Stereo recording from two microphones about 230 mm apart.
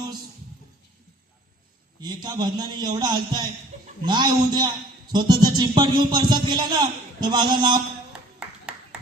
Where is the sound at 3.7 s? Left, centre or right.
Right.